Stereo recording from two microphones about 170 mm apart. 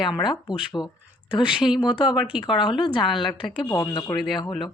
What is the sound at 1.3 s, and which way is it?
Speech, 5° right (ahead or behind).